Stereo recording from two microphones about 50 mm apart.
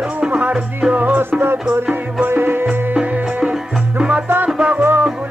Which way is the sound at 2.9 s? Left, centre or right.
Right.